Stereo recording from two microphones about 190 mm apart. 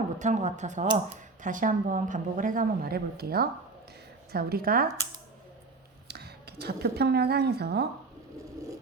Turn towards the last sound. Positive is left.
turn(degrees=-60)  # may be behind; listen again after turning